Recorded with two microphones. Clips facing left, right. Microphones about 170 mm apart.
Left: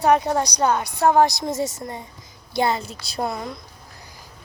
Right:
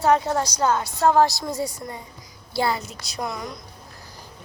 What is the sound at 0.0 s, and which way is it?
A woman's voice, 20° left (ahead or behind).